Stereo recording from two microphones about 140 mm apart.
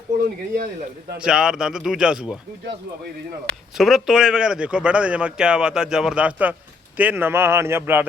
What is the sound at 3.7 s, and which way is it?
A man's voice, centre (ahead or behind).